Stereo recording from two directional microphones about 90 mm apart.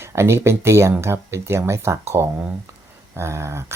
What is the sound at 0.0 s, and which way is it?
Speech, 30° right (ahead or behind).